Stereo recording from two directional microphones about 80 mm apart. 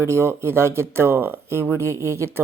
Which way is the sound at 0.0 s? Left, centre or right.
Right.